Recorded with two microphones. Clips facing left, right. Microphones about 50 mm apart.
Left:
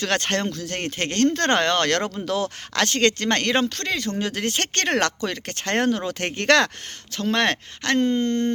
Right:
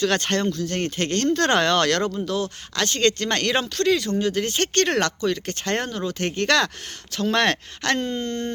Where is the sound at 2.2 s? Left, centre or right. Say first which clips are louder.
Left 1 dB; left.